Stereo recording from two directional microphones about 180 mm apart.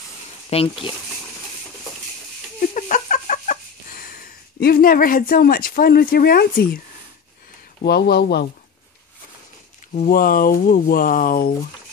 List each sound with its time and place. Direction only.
0.5 s speech: 30° left (ahead or behind)
2.6 s fowl: 45° left (ahead or behind)
7.8 s speech: 65° left (ahead or behind)
9.9 s speech: 50° left (ahead or behind)